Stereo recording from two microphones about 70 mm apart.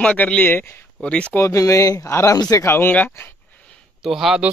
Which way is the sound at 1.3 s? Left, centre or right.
Left.